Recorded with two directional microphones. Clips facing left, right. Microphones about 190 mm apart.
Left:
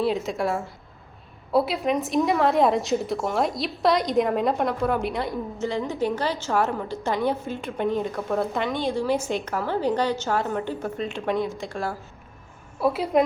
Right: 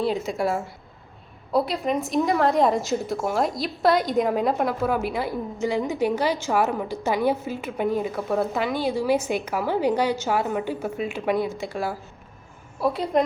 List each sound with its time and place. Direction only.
0.0 s a woman's voice: centre (ahead or behind)